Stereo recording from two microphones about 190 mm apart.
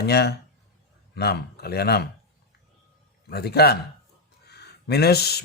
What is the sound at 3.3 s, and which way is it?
Speech, 55° left (ahead or behind).